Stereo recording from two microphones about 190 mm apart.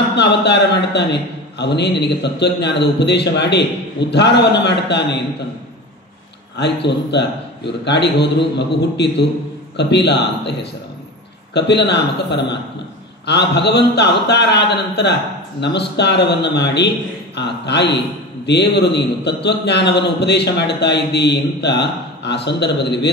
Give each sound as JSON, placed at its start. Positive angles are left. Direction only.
{"t": 0.1, "sound": "a man's voice", "side_deg": 65}
{"t": 6.5, "sound": "a man's voice", "side_deg": 65}